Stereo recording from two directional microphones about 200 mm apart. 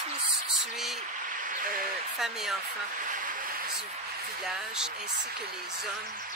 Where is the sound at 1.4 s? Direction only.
40° right (ahead or behind).